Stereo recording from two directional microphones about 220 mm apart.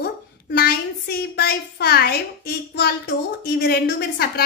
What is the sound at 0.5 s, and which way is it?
A woman's voice, 45° left (ahead or behind).